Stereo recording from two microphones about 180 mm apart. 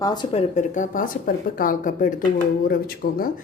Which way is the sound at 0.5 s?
45° left (ahead or behind).